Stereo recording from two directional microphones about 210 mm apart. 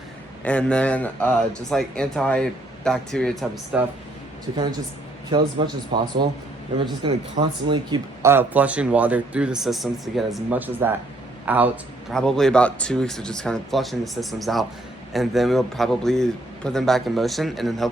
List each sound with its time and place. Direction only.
0.4 s speech: 5° left (ahead or behind)
5.3 s speech: 20° right (ahead or behind)
12.1 s speech: 5° left (ahead or behind)